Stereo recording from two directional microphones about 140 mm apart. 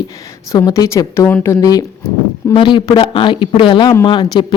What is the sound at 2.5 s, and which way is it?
A woman's voice, 35° left (ahead or behind).